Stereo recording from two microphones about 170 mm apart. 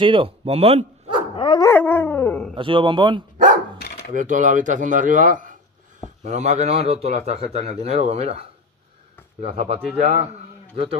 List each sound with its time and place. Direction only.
0.0 s speech: 30° right (ahead or behind)
1.3 s dog: 30° left (ahead or behind)
1.7 s dog: 10° left (ahead or behind)
2.5 s a man's voice: 30° right (ahead or behind)
3.7 s dog: 65° left (ahead or behind)
4.1 s a man's voice: 50° right (ahead or behind)